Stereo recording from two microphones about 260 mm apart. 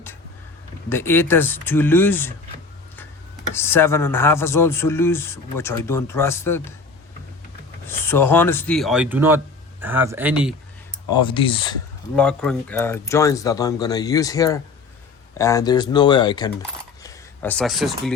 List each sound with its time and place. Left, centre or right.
0.9 s speech: centre
3.5 s speech: centre
7.9 s speech: centre
11.1 s speech: centre
12.1 s speech: centre
17.0 s a sound: centre